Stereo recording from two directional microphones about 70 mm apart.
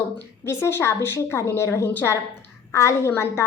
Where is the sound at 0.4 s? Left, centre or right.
Left.